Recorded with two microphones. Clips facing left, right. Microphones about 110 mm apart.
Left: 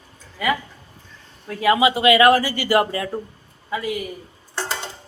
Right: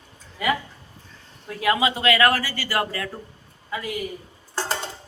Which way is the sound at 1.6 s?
5° left (ahead or behind).